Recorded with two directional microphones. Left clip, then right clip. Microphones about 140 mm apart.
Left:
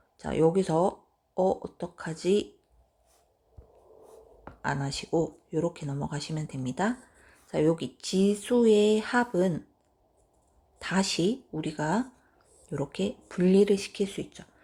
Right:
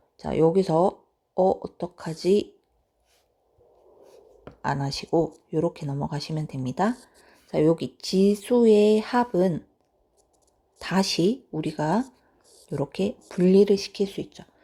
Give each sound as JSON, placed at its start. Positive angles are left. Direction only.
{"t": 0.2, "sound": "speech", "side_deg": -30}
{"t": 4.6, "sound": "speech", "side_deg": -35}
{"t": 10.8, "sound": "speech", "side_deg": -35}